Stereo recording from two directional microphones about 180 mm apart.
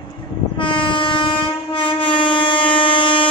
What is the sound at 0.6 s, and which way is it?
Train, 25° left (ahead or behind).